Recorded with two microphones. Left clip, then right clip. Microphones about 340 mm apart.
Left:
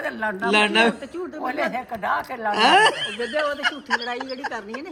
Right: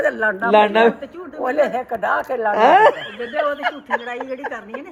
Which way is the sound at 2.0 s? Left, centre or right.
Centre.